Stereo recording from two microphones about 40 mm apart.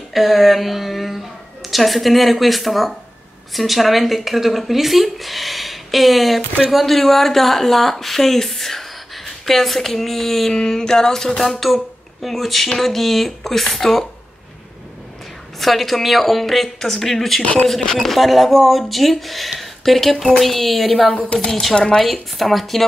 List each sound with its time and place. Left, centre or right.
0.1 s a woman's voice: centre
15.6 s speech: centre
17.4 s speech: left
17.6 s speech: centre
21.2 s speech: left
21.5 s speech: centre